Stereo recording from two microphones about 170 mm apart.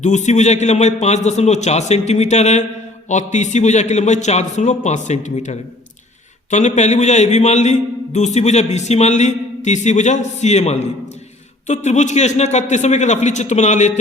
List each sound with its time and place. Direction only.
0.0 s a man's voice: 45° left (ahead or behind)